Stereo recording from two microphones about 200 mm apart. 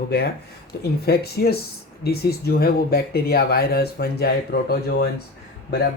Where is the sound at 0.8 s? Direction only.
50° left (ahead or behind).